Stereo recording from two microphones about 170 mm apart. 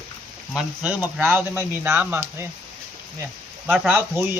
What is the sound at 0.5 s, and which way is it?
Speech, 5° right (ahead or behind).